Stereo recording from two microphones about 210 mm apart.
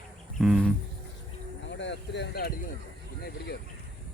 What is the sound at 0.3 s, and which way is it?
Speech, centre (ahead or behind).